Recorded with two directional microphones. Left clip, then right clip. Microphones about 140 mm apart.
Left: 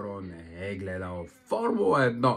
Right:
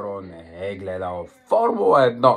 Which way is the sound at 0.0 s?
25° left (ahead or behind).